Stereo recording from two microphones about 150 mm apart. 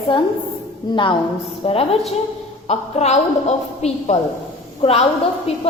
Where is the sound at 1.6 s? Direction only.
40° left (ahead or behind).